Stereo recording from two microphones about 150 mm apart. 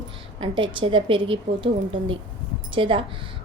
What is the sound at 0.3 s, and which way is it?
A woman's voice, 35° right (ahead or behind).